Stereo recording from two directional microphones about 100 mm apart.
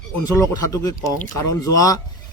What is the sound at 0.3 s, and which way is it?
A man's voice, 35° left (ahead or behind).